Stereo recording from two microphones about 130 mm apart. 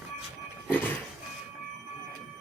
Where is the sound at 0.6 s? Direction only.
15° left (ahead or behind).